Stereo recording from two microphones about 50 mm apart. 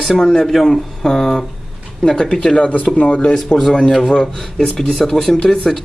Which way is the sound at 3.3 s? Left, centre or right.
Centre.